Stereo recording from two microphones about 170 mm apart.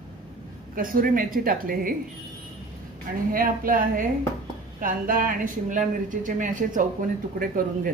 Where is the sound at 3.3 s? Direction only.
55° right (ahead or behind).